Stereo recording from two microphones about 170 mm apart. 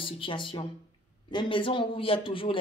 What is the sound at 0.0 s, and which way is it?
Speech, 30° left (ahead or behind).